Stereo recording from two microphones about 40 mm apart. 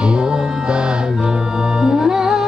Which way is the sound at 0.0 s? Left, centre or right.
Right.